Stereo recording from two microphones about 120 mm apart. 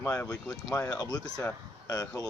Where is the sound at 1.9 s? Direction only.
30° left (ahead or behind).